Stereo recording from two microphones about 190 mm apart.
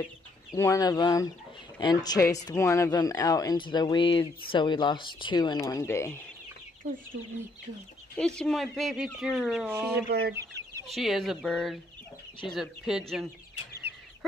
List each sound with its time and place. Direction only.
0.6 s speech: 15° left (ahead or behind)
8.2 s speech: 5° left (ahead or behind)
10.0 s speech: 55° right (ahead or behind)
10.9 s speech: centre (ahead or behind)